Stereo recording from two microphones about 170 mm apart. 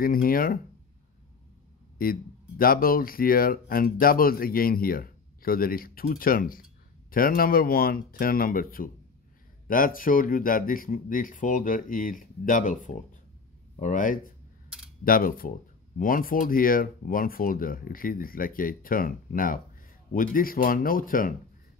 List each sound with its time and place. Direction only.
0.0 s speech: 55° left (ahead or behind)
2.0 s speech: 60° left (ahead or behind)